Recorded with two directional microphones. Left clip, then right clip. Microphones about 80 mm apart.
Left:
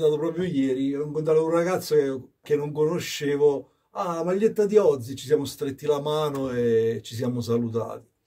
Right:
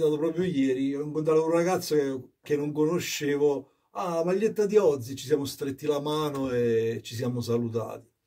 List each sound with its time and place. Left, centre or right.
0.0 s a man's voice: left